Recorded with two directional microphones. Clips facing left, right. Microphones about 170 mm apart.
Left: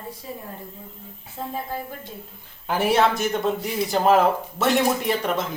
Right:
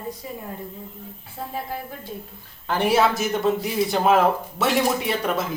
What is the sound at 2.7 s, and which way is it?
Speech, centre (ahead or behind).